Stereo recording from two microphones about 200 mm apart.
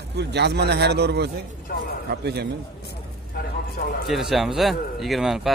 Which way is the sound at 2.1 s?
55° right (ahead or behind).